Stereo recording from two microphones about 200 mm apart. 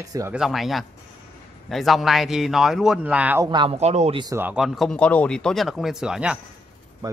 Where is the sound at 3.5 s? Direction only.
25° right (ahead or behind).